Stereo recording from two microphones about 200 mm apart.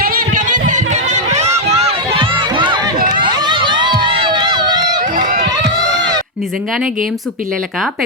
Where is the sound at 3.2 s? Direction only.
20° right (ahead or behind).